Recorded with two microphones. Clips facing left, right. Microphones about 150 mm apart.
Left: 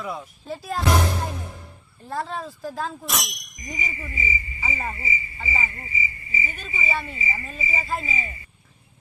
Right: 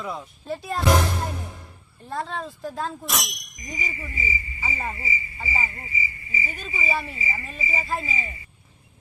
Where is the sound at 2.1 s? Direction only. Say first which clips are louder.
Left 1 dB; centre (ahead or behind).